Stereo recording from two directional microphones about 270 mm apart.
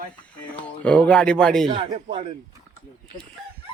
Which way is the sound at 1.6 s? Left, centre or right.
Right.